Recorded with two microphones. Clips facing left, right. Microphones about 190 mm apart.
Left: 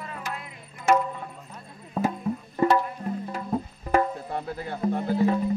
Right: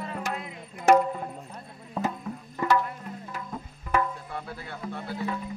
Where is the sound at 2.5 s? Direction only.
30° left (ahead or behind).